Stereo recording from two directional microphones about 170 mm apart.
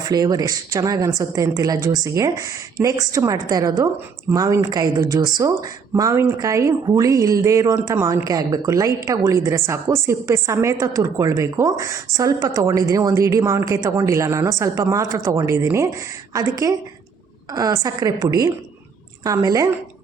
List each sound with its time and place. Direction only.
0.0 s a woman's voice: 20° right (ahead or behind)